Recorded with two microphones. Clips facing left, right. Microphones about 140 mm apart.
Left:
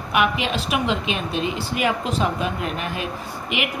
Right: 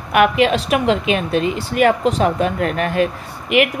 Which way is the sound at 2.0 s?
50° right (ahead or behind).